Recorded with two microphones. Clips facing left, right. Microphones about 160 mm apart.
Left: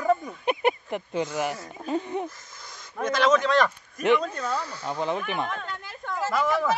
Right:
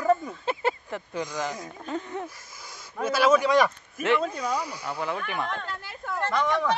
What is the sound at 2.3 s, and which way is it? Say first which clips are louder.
Speech: even; 10° right (ahead or behind).